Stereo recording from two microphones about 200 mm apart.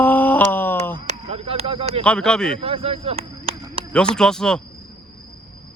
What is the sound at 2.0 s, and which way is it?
Speech, 5° left (ahead or behind).